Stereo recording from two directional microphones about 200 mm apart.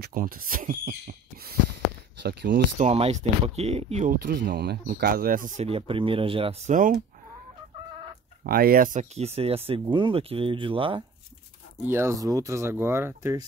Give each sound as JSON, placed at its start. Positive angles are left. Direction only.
{"t": 0.0, "sound": "speech", "side_deg": -45}
{"t": 2.8, "sound": "speech", "side_deg": -30}
{"t": 5.7, "sound": "speech", "side_deg": -25}
{"t": 8.5, "sound": "speech", "side_deg": -50}
{"t": 11.8, "sound": "speech", "side_deg": -10}